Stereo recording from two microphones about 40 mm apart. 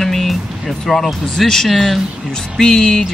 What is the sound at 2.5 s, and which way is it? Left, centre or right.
Speech, centre.